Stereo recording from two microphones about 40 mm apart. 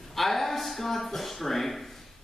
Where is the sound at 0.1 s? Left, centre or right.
Centre.